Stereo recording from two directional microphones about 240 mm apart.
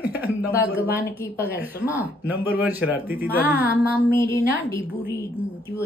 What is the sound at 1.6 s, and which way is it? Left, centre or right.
A man's voice, centre.